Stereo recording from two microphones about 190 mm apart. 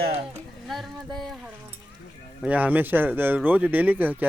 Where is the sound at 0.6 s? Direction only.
Centre (ahead or behind).